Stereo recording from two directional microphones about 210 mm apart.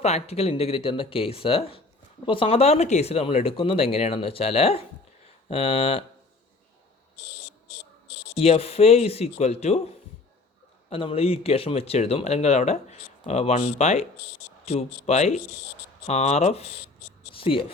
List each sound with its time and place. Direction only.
0.0 s speech: 30° left (ahead or behind)
8.4 s speech: 30° left (ahead or behind)